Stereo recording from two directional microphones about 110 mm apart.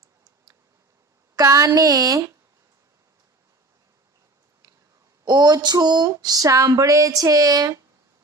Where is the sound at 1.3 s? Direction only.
30° right (ahead or behind).